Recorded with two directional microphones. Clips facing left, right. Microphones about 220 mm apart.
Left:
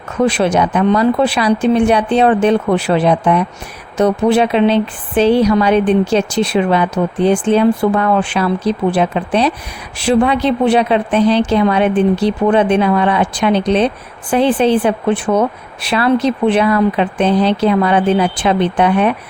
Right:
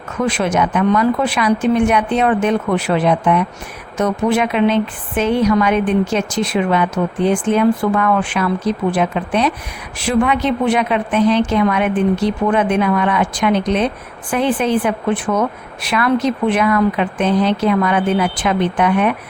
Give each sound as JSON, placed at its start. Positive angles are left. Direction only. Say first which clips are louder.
{"t": 0.2, "sound": "a woman's voice", "louder": "left 4 dB", "side_deg": 30}